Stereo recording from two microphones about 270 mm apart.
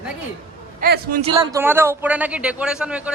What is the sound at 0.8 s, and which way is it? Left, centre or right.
Speech, right.